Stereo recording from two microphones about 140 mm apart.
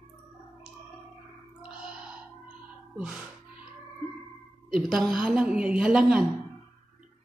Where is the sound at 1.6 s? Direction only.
5° right (ahead or behind).